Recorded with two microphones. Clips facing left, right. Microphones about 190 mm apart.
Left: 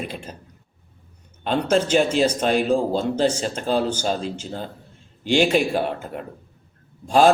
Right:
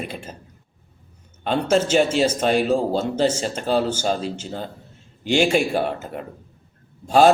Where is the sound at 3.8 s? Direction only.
50° right (ahead or behind).